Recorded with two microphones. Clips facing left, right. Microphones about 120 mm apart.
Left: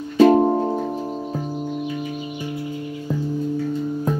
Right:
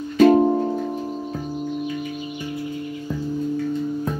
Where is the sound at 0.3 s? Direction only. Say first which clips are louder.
Even; 30° left (ahead or behind).